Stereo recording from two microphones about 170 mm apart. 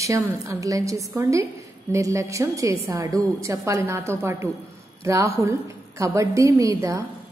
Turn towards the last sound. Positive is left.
turn(degrees=-20)  # may be behind; listen again after turning